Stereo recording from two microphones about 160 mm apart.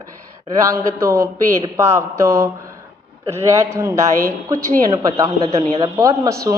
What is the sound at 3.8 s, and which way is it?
A man's voice, 20° right (ahead or behind).